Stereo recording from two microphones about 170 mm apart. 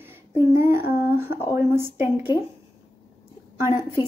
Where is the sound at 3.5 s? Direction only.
15° right (ahead or behind).